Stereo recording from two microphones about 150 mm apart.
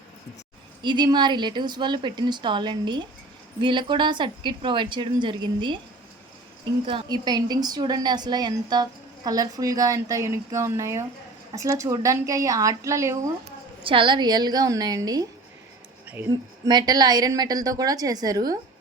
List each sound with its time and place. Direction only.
0.8 s a woman's voice: 30° right (ahead or behind)
6.8 s a woman's voice: 30° right (ahead or behind)
13.8 s a woman's voice: 35° right (ahead or behind)
16.6 s a woman's voice: 25° right (ahead or behind)